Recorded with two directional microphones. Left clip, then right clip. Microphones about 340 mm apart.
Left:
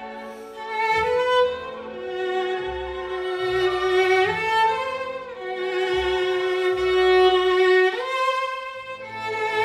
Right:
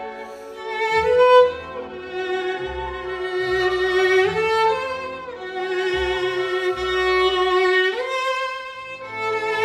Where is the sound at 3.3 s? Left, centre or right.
Centre.